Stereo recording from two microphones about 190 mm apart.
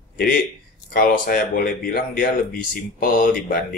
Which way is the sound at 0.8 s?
50° left (ahead or behind).